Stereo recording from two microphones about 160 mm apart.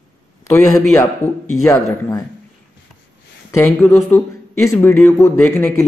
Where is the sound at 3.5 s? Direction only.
15° left (ahead or behind).